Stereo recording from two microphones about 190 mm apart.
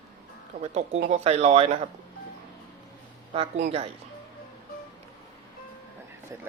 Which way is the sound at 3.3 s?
35° right (ahead or behind).